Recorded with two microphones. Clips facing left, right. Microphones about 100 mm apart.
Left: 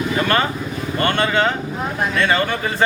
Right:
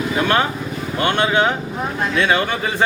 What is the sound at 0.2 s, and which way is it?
Speech, 10° right (ahead or behind).